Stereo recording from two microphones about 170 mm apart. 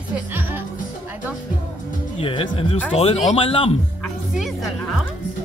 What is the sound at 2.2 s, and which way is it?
Speech, 30° left (ahead or behind).